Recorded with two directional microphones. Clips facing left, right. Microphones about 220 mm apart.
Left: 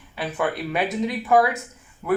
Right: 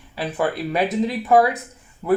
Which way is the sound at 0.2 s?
35° right (ahead or behind).